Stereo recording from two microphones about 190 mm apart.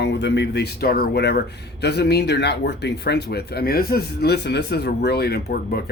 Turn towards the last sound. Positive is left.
turn(degrees=55)  # may be behind; listen again after turning